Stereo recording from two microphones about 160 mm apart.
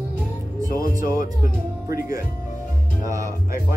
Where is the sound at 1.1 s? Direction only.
60° left (ahead or behind).